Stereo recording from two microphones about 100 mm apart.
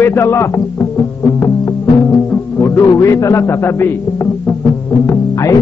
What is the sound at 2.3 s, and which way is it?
A man's voice, 25° left (ahead or behind).